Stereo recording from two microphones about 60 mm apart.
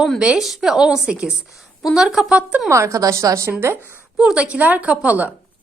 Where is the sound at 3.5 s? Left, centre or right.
Right.